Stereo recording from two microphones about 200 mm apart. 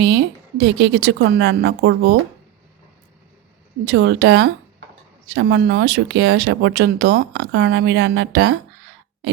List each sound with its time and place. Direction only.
0.0 s speech: 60° right (ahead or behind)
3.8 s speech: 60° right (ahead or behind)